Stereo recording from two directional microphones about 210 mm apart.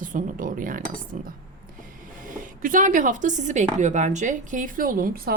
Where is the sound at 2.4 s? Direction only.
40° right (ahead or behind).